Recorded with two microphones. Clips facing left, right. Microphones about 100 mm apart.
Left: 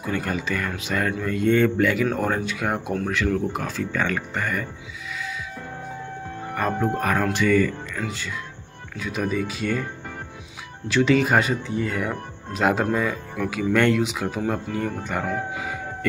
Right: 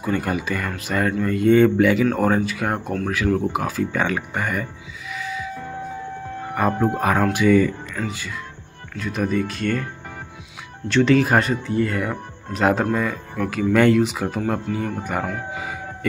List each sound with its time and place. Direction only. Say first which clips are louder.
0.0 s speech: right 3 dB; 5° right (ahead or behind)
6.5 s speech: right 3 dB; 5° right (ahead or behind)
7.0 s speech: right 3 dB; 15° right (ahead or behind)
7.9 s speech: right 2 dB; 5° right (ahead or behind)
10.9 s speech: right 2 dB; 5° left (ahead or behind)